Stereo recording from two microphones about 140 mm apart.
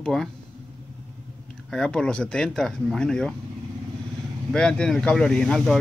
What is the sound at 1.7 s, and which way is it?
Speech, 5° left (ahead or behind).